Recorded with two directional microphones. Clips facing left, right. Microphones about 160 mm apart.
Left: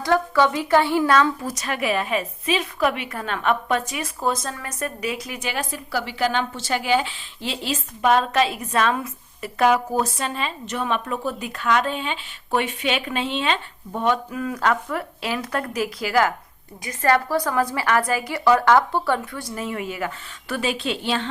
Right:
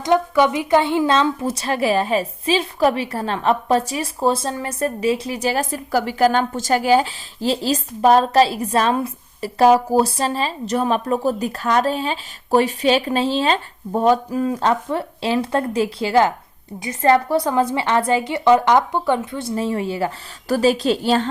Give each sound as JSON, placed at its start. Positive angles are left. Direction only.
{"t": 0.0, "sound": "a woman's voice", "side_deg": -20}